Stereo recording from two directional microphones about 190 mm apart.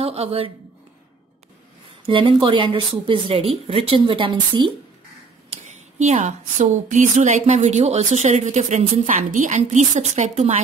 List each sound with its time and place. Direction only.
0.0 s a woman's voice: 30° right (ahead or behind)
2.0 s speech: 25° right (ahead or behind)
5.6 s a woman's voice: 40° right (ahead or behind)